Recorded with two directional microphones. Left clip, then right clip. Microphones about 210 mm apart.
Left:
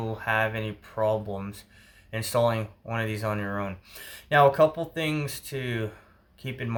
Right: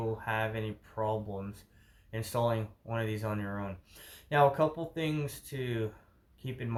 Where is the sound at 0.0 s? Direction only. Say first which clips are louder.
Left 7 dB; 20° left (ahead or behind).